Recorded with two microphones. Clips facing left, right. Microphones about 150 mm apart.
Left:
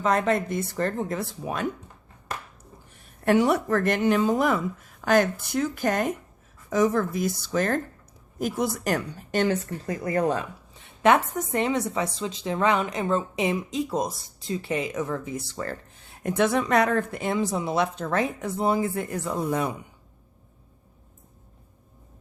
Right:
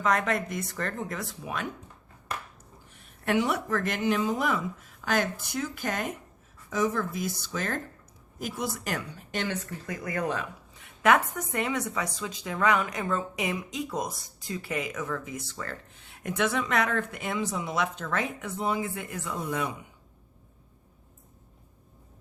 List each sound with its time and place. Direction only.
0.0 s speech: 30° left (ahead or behind)
2.9 s speech: 45° left (ahead or behind)